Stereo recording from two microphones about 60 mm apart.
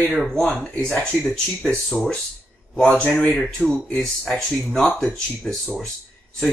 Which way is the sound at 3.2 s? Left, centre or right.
Centre.